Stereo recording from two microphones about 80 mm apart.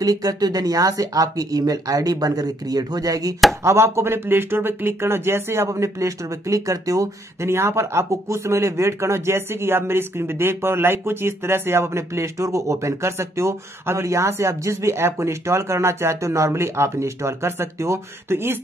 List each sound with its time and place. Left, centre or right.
0.0 s speech: right
3.6 s speech: right
7.4 s speech: right